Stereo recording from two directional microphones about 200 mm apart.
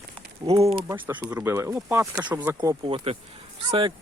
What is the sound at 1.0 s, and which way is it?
Speech, 15° right (ahead or behind).